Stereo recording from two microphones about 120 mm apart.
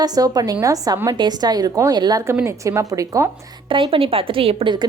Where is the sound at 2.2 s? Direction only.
20° right (ahead or behind).